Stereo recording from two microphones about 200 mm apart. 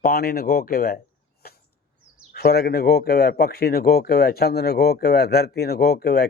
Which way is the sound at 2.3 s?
55° left (ahead or behind).